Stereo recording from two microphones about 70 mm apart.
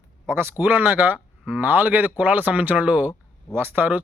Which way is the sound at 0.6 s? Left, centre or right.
Right.